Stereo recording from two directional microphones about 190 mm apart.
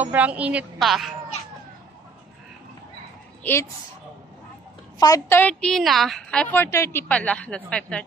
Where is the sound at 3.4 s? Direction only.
15° left (ahead or behind).